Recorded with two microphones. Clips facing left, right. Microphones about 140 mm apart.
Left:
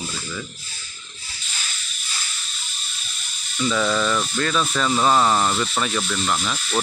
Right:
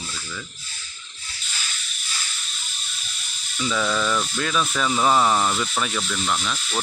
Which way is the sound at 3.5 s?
Centre (ahead or behind).